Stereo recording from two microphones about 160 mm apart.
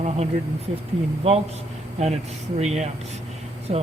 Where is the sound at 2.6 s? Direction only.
45° right (ahead or behind).